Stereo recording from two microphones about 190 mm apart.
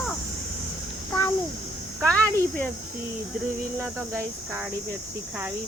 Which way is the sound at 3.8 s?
10° right (ahead or behind).